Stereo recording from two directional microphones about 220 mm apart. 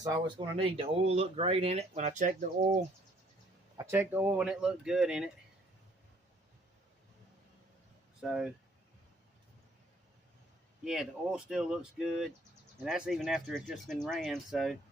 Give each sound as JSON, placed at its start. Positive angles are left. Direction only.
{"t": 0.0, "sound": "speech", "side_deg": -20}
{"t": 3.8, "sound": "speech", "side_deg": -10}
{"t": 8.2, "sound": "speech", "side_deg": -5}
{"t": 10.8, "sound": "speech", "side_deg": 0}